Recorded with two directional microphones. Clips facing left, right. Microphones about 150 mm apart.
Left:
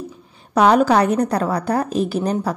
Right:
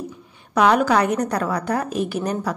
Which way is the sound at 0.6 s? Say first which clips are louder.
Left 3 dB; 35° left (ahead or behind).